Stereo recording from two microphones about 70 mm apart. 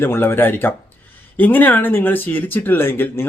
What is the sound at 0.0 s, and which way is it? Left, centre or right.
Speech, left.